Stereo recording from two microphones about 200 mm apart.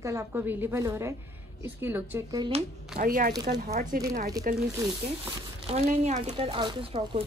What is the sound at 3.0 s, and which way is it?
Speech, 45° right (ahead or behind).